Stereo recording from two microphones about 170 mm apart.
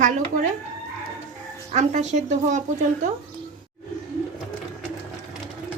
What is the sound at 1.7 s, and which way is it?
Speech, 45° right (ahead or behind).